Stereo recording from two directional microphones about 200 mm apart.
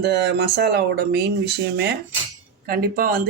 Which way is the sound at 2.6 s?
50° right (ahead or behind).